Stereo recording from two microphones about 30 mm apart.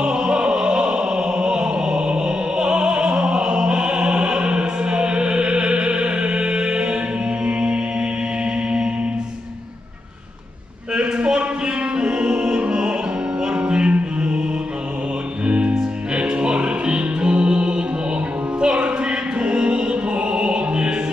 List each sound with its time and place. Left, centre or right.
0.0 s music: right
11.2 s music: right
15.4 s music: right